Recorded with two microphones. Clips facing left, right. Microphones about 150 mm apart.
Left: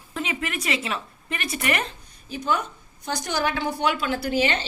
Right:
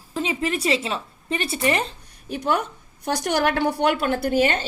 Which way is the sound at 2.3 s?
65° right (ahead or behind).